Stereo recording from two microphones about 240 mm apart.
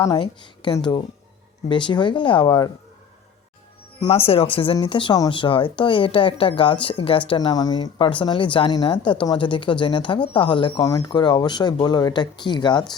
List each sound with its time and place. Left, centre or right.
0.0 s speech: centre
4.0 s speech: left